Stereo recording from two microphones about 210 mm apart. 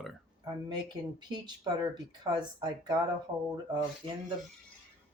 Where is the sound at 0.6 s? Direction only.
20° right (ahead or behind).